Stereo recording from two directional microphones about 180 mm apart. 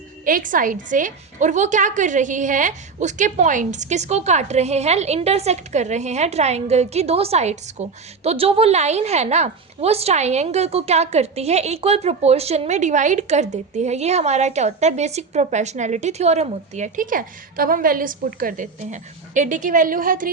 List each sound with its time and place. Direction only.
0.3 s a woman's voice: 50° right (ahead or behind)